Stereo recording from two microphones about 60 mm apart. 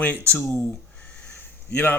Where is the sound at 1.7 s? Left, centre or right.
Left.